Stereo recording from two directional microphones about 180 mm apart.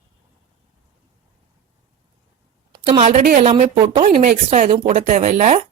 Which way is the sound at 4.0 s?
45° right (ahead or behind).